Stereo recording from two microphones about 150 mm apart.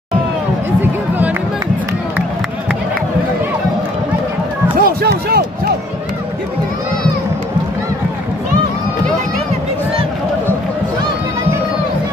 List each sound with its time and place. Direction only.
4.7 s run: 80° right